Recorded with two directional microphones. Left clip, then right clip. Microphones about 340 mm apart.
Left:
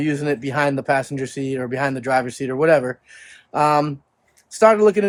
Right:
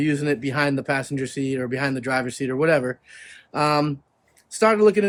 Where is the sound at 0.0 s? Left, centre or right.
Centre.